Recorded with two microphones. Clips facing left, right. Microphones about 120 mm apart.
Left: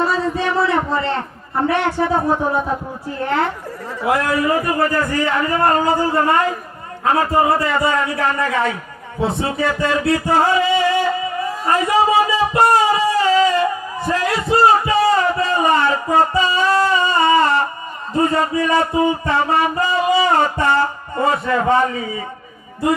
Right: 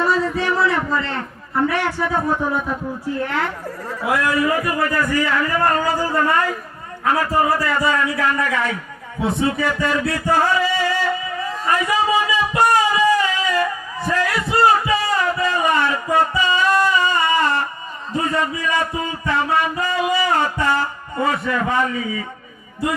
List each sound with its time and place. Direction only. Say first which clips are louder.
0.0 s a man's voice: left 1 dB; 25° left (ahead or behind)
11.7 s a sound: left 3 dB; 35° left (ahead or behind)
18.2 s a man's voice: left 5 dB; 30° left (ahead or behind)